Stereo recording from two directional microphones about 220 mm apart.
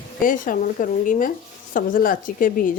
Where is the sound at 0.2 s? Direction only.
40° left (ahead or behind).